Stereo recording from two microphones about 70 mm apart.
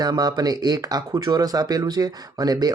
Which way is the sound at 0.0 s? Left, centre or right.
Right.